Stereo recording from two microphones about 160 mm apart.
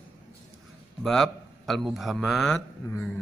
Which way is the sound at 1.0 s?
Centre (ahead or behind).